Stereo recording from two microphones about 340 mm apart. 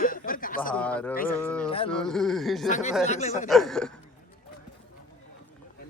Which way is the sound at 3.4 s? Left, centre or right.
Centre.